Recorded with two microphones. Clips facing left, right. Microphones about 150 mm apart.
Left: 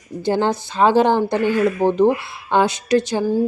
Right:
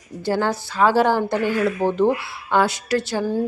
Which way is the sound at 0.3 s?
20° left (ahead or behind).